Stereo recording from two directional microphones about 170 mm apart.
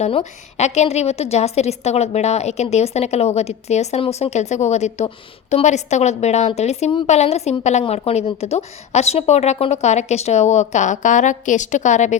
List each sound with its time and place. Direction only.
0.0 s a woman's voice: 40° left (ahead or behind)